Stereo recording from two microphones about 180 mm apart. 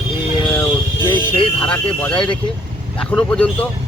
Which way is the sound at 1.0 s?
15° left (ahead or behind).